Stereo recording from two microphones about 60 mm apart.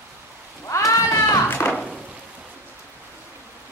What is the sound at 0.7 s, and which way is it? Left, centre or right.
Rain, left.